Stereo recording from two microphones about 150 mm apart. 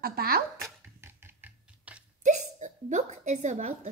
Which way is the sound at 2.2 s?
55° right (ahead or behind).